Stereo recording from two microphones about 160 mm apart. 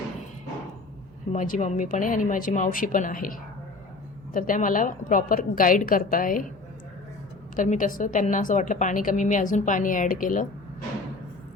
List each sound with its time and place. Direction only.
1.3 s a woman's voice: 50° left (ahead or behind)
4.4 s a woman's voice: 60° left (ahead or behind)
7.5 s a woman's voice: 55° left (ahead or behind)